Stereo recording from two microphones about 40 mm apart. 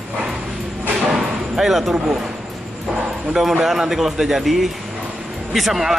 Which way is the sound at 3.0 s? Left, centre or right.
Right.